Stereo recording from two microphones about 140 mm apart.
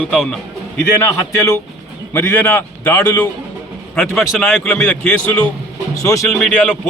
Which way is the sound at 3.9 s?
Centre (ahead or behind).